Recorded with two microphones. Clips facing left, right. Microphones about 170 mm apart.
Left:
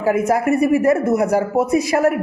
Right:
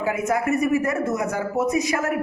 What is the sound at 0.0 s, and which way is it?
Speech, 35° left (ahead or behind).